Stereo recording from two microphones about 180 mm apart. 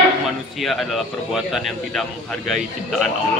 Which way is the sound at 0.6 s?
Centre (ahead or behind).